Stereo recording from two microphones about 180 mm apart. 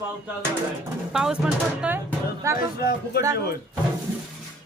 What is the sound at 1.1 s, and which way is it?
Speech, 5° right (ahead or behind).